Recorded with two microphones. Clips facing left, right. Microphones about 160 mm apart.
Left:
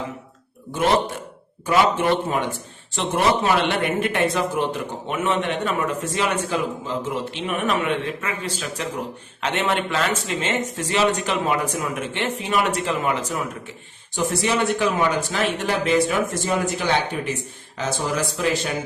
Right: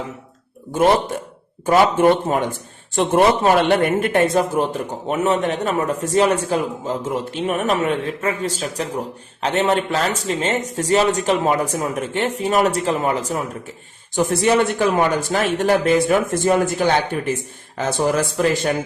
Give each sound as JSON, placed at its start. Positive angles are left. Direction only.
{"t": 0.7, "sound": "a man's voice", "side_deg": -45}
{"t": 14.2, "sound": "speech", "side_deg": -50}